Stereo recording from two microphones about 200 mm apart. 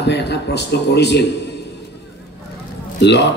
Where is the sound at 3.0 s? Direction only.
60° left (ahead or behind).